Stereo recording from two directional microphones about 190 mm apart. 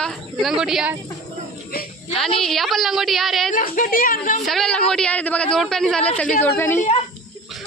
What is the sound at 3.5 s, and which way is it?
Speech, 45° left (ahead or behind).